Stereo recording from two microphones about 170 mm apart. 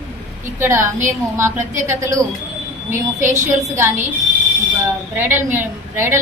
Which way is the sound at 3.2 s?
45° right (ahead or behind).